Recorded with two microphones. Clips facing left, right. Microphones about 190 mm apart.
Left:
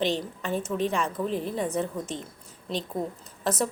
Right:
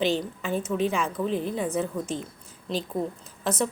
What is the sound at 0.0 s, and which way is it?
Speech, centre (ahead or behind).